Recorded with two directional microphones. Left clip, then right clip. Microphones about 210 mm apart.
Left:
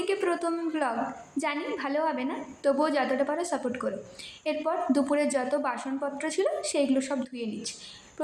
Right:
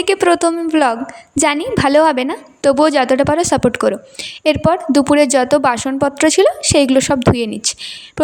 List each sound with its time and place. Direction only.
0.0 s a woman's voice: 50° right (ahead or behind)